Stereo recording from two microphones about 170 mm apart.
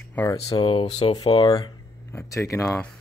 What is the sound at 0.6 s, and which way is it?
Speech, 30° left (ahead or behind).